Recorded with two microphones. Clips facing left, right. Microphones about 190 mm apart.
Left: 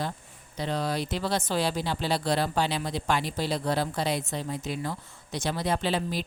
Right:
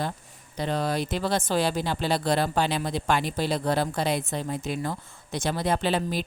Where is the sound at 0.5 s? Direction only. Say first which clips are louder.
Right 2 dB; 50° right (ahead or behind).